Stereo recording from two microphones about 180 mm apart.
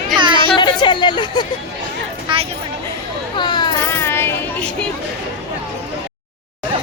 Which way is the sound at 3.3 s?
25° left (ahead or behind).